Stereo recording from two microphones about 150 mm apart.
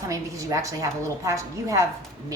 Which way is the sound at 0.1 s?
20° right (ahead or behind).